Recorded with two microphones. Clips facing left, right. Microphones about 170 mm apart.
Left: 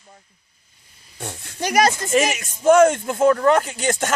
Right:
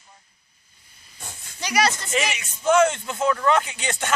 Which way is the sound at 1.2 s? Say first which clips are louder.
Left 8 dB; 70° left (ahead or behind).